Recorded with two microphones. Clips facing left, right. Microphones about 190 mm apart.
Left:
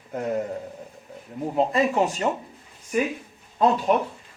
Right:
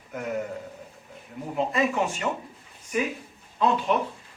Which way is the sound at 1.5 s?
35° left (ahead or behind).